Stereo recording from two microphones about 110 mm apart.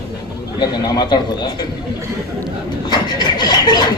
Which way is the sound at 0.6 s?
40° left (ahead or behind).